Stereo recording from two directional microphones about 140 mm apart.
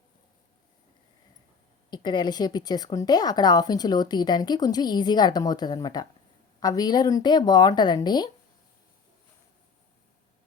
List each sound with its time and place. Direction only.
1.9 s a woman's voice: 30° left (ahead or behind)